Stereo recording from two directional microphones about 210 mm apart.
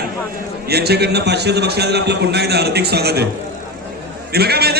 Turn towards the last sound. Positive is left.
turn(degrees=-50)  # may be behind; listen again after turning